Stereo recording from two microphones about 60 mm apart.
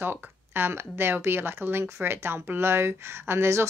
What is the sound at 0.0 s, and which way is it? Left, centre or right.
Speech, right.